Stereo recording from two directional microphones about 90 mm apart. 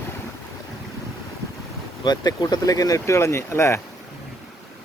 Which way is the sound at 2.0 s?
50° left (ahead or behind).